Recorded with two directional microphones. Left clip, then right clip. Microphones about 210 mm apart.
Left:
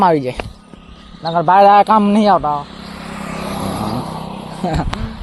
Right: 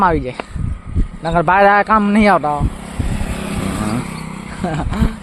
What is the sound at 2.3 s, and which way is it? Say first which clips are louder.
Vehicle: even; 25° right (ahead or behind).